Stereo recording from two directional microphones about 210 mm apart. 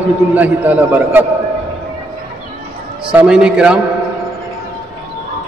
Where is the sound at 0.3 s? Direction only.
10° right (ahead or behind).